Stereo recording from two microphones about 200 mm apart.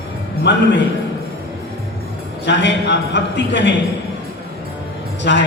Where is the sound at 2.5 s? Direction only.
60° left (ahead or behind).